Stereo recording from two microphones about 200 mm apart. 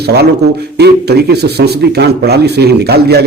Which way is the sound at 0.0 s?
55° right (ahead or behind).